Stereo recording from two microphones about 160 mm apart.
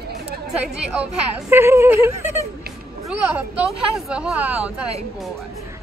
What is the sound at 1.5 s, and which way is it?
Speech, 15° right (ahead or behind).